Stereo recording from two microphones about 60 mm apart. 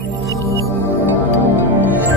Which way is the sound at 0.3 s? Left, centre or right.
Left.